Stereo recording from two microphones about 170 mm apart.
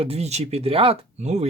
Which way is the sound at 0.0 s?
35° right (ahead or behind).